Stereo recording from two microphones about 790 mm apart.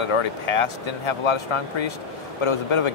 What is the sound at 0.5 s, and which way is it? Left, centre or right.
Speech, left.